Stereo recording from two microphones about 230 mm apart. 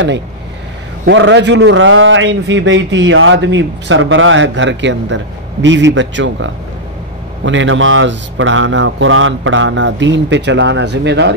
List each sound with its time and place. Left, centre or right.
1.0 s a man's voice: right